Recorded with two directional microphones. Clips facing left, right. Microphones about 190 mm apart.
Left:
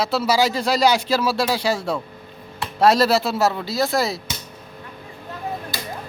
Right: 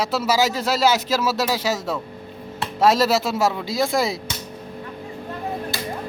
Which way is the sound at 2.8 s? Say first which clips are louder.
Left 1 dB; 10° right (ahead or behind).